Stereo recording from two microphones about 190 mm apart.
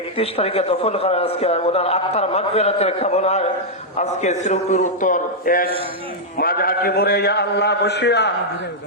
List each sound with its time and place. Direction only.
0.2 s a man's voice: 30° left (ahead or behind); by 8.3 s 60° left (ahead or behind)